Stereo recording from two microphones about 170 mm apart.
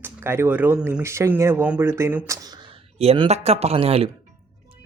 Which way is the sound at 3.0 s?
35° right (ahead or behind).